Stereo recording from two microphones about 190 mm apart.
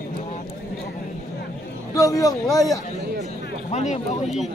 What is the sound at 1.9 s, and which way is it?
Speech, 20° left (ahead or behind).